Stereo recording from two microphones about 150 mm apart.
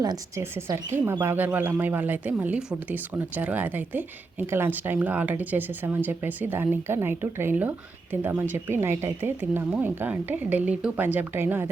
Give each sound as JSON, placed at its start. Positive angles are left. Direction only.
{"t": 0.0, "sound": "speech", "side_deg": -20}